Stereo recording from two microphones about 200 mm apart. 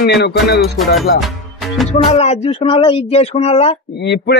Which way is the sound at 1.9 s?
30° left (ahead or behind).